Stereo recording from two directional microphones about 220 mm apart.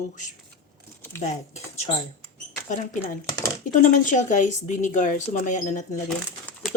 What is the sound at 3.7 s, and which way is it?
Speech, 35° left (ahead or behind).